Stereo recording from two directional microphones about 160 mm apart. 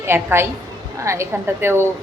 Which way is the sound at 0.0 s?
15° right (ahead or behind).